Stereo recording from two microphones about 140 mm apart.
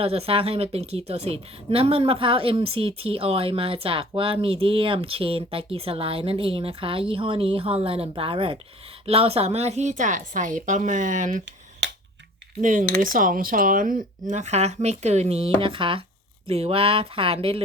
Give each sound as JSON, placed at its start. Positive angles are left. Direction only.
{"t": 0.0, "sound": "a woman's voice", "side_deg": -45}
{"t": 13.0, "sound": "speech", "side_deg": -75}